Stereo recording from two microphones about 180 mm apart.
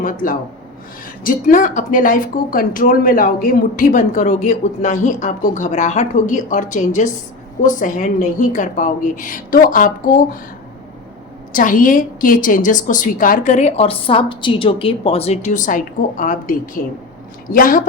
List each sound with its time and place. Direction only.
0.0 s a woman's voice: 50° left (ahead or behind)
11.5 s a woman's voice: 45° left (ahead or behind)